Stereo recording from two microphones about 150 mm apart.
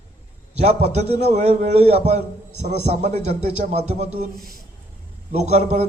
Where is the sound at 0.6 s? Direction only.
45° right (ahead or behind).